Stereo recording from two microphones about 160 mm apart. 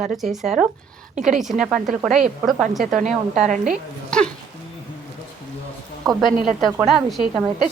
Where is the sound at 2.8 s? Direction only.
50° right (ahead or behind).